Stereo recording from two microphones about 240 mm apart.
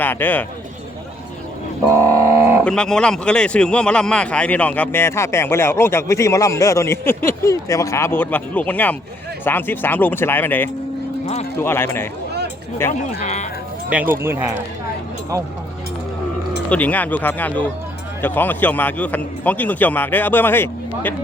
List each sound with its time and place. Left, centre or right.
0.0 s speech: centre
2.0 s a sound: centre
2.6 s speech: centre
13.0 s speech: left
14.1 s speech: centre
16.6 s speech: centre